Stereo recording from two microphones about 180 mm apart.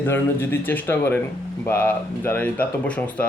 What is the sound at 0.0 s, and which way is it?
Speech, 10° left (ahead or behind).